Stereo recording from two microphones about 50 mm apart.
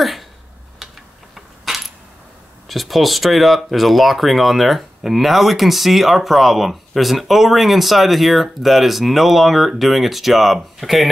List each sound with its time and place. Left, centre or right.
1.3 s coin: centre
2.7 s speech: centre